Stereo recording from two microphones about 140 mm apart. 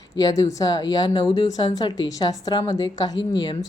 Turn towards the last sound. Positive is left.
turn(degrees=30)  # may be behind; listen again after turning